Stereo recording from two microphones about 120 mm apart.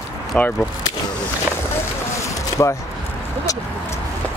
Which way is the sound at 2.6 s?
25° left (ahead or behind).